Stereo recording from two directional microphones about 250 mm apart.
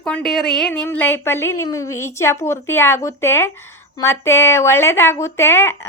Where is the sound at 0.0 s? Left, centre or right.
Centre.